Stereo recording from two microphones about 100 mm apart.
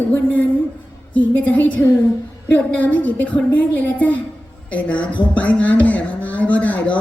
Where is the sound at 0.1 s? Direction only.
15° left (ahead or behind).